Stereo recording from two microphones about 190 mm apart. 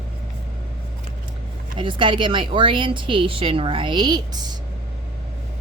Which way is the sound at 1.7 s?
25° right (ahead or behind).